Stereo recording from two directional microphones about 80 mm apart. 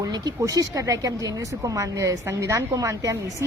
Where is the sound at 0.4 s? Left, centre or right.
Right.